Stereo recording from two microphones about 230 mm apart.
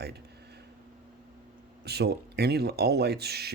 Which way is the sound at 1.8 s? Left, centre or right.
Right.